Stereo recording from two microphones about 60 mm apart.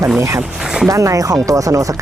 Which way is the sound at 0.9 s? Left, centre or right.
Right.